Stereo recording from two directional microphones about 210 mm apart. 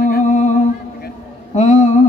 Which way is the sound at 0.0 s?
40° left (ahead or behind).